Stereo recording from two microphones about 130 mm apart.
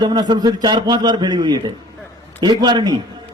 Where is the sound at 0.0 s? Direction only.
35° right (ahead or behind).